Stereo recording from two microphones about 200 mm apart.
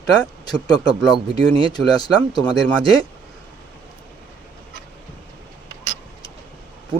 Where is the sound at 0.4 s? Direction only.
20° left (ahead or behind).